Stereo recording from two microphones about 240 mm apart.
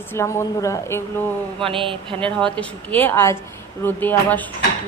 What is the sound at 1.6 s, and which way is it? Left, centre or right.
Speech, right.